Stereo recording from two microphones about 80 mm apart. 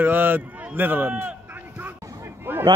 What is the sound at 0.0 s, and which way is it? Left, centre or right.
Speech, right.